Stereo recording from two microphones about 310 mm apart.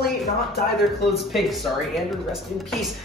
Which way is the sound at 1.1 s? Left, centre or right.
Centre.